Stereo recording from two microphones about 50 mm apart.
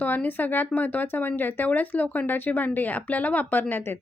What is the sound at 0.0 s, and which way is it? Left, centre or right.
A woman's voice, left.